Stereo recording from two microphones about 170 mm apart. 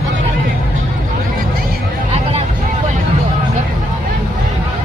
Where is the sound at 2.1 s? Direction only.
40° right (ahead or behind).